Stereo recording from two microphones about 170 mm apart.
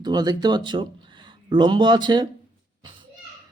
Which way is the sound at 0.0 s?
25° right (ahead or behind).